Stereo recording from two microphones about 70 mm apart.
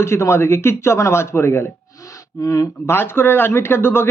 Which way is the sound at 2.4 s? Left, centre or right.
Left.